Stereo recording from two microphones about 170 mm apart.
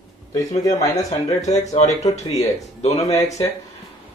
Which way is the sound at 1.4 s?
40° left (ahead or behind).